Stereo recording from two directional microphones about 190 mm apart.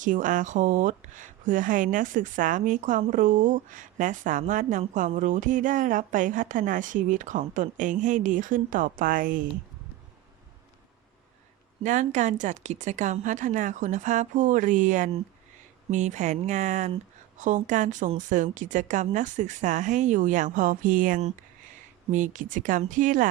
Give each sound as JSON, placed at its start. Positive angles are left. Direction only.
{"t": 0.0, "sound": "speech", "side_deg": -45}
{"t": 11.8, "sound": "speech", "side_deg": -40}